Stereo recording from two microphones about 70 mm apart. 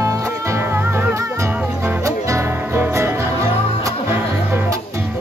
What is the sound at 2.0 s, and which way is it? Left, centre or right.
Music, right.